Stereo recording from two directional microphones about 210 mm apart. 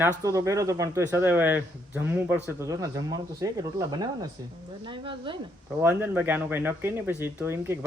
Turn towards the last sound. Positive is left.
turn(degrees=-10)  # may be behind; listen again after turning